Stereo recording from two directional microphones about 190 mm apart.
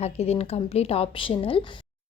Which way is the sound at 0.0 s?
35° left (ahead or behind).